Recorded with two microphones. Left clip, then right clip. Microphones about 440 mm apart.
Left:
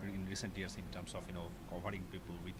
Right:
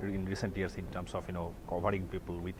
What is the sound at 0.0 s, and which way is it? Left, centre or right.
Speech, right.